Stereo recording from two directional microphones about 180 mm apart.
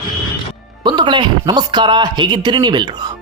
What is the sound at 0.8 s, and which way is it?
Speech, 25° right (ahead or behind).